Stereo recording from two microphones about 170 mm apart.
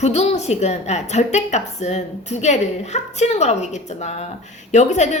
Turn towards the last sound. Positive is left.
turn(degrees=45)  # may be behind; listen again after turning